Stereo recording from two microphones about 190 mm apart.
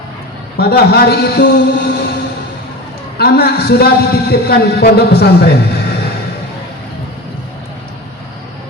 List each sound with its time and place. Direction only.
0.5 s a man's voice: 60° left (ahead or behind)
3.2 s a man's voice: 55° left (ahead or behind)